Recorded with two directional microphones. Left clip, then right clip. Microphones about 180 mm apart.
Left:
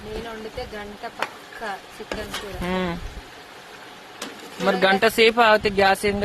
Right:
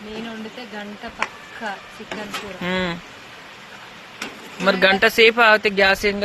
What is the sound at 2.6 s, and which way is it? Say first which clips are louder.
Speech: right 3 dB; 5° left (ahead or behind).